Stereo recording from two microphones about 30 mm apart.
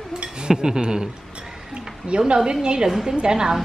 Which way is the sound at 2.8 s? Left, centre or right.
Centre.